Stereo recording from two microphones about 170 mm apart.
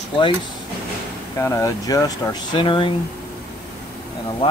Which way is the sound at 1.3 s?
15° left (ahead or behind).